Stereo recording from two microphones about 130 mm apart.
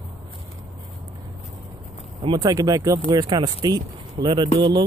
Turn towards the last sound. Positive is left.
turn(degrees=-35)  # may be behind; listen again after turning